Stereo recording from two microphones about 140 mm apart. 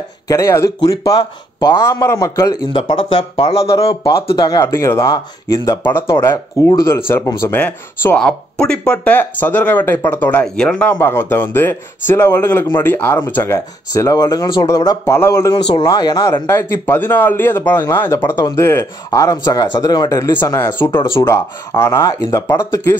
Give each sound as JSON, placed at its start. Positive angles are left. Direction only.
{"t": 0.3, "sound": "speech", "side_deg": 20}
{"t": 5.9, "sound": "speech", "side_deg": 15}
{"t": 15.5, "sound": "speech", "side_deg": 35}